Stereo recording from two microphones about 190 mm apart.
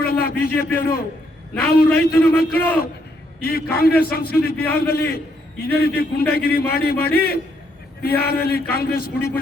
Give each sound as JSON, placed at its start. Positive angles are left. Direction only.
{"t": 0.0, "sound": "a man's voice", "side_deg": 55}